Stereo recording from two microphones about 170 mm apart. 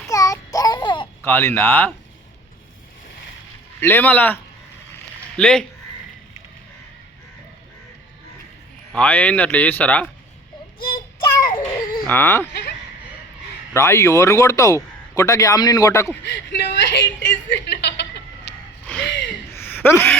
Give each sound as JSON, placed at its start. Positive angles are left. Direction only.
{"t": 0.1, "sound": "babbling", "side_deg": 20}
{"t": 1.2, "sound": "speech", "side_deg": 15}
{"t": 3.8, "sound": "speech", "side_deg": 10}
{"t": 5.4, "sound": "speech", "side_deg": 5}
{"t": 8.9, "sound": "speech", "side_deg": 5}
{"t": 10.8, "sound": "child singing", "side_deg": 60}
{"t": 11.4, "sound": "a sound", "side_deg": 55}
{"t": 12.0, "sound": "speech", "side_deg": 15}
{"t": 13.7, "sound": "speech", "side_deg": 15}
{"t": 16.2, "sound": "chuckle", "side_deg": 90}
{"t": 19.1, "sound": "gasp", "side_deg": 90}
{"t": 19.5, "sound": "a sound", "side_deg": 10}